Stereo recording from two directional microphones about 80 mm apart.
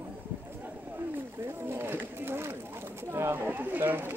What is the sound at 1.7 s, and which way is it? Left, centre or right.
Chatter, right.